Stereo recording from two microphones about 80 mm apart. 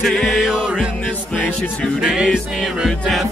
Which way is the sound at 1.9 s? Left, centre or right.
Centre.